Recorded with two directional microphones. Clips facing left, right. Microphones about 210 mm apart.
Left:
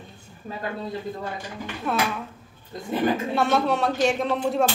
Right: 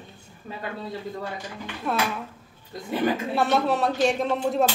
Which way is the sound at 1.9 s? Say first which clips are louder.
Left 1 dB; centre (ahead or behind).